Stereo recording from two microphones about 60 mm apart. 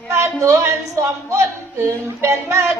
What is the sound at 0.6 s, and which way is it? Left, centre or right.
Singing, right.